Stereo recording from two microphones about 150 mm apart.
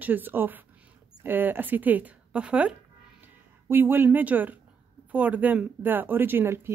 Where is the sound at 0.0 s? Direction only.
10° right (ahead or behind).